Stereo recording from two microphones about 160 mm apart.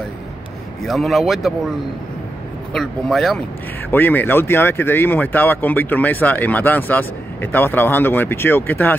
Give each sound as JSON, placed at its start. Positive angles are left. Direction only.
{"t": 0.8, "sound": "speech", "side_deg": 0}
{"t": 2.7, "sound": "speech", "side_deg": 0}
{"t": 3.9, "sound": "speech", "side_deg": 10}